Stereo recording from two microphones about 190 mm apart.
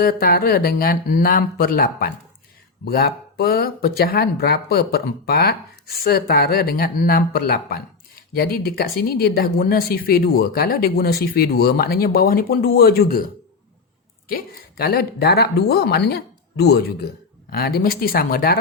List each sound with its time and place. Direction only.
0.0 s speech: 50° left (ahead or behind)
14.3 s speech: 50° left (ahead or behind)